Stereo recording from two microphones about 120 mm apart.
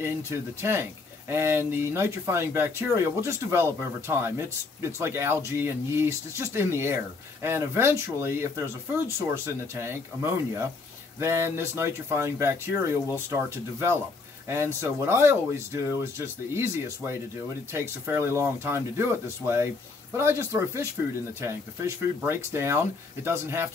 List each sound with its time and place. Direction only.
0.0 s speech: 20° right (ahead or behind)